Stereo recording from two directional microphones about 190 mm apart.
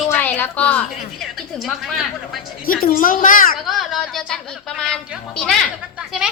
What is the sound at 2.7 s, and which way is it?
Speech, 50° left (ahead or behind).